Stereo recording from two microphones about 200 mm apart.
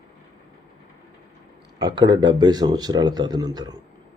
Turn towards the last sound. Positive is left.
turn(degrees=-20)  # may be behind; listen again after turning